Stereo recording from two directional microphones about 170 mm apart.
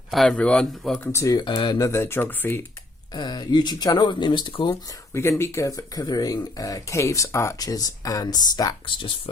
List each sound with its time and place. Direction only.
0.1 s a man's voice: centre (ahead or behind)
1.0 s speech: 15° left (ahead or behind)
3.2 s speech: 25° left (ahead or behind)
5.1 s speech: 15° left (ahead or behind)